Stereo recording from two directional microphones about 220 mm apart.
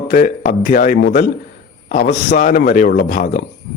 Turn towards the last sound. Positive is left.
turn(degrees=40)  # may be behind; listen again after turning